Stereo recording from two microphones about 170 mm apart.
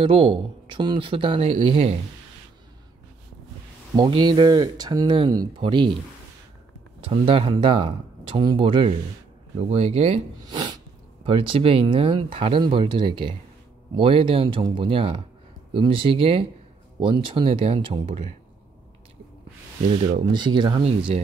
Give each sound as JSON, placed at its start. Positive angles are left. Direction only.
{"t": 0.0, "sound": "speech", "side_deg": -30}
{"t": 3.9, "sound": "speech", "side_deg": -25}
{"t": 7.1, "sound": "speech", "side_deg": -30}
{"t": 20.0, "sound": "speech", "side_deg": -30}